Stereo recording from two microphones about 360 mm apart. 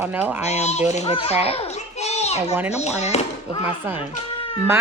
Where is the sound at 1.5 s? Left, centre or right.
Centre.